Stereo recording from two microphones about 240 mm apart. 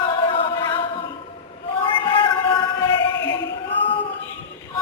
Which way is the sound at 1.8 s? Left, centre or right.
Left.